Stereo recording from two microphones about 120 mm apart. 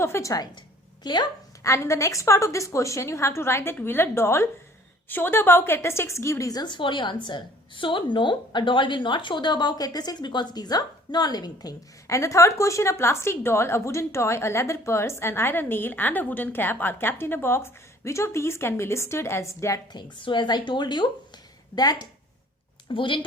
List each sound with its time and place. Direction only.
0.0 s a woman's voice: 25° left (ahead or behind)
1.0 s a woman's voice: 40° left (ahead or behind)
1.6 s a woman's voice: 25° left (ahead or behind)
19.9 s a woman's voice: 40° left (ahead or behind)
22.9 s speech: 45° left (ahead or behind)